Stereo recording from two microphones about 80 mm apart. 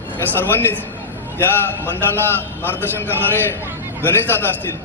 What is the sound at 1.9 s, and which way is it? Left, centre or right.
A man's voice, left.